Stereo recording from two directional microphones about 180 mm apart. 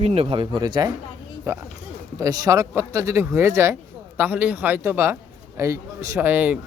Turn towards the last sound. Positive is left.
turn(degrees=-10)  # may be behind; listen again after turning